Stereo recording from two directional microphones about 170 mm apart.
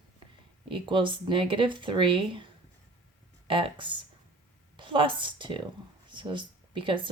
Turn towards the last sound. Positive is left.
turn(degrees=-30)  # may be behind; listen again after turning